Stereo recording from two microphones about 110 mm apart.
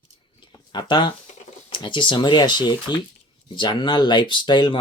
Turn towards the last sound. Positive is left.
turn(degrees=45)  # may be behind; listen again after turning